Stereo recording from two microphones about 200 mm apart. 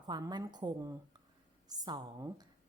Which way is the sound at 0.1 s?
20° right (ahead or behind).